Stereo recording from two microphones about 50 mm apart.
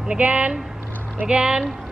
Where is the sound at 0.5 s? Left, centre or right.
Centre.